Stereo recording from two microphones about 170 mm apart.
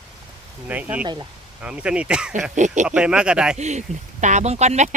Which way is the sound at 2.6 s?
45° right (ahead or behind).